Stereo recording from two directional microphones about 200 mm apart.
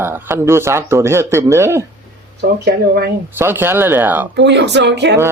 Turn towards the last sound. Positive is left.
turn(degrees=-60)  # may be behind; listen again after turning